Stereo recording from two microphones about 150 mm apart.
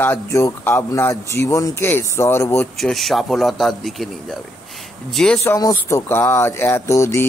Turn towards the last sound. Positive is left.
turn(degrees=20)  # may be behind; listen again after turning